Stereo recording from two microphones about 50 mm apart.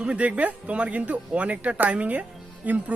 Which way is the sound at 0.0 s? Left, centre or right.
Right.